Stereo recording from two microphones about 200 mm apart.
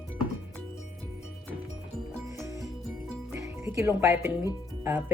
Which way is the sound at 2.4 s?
15° right (ahead or behind).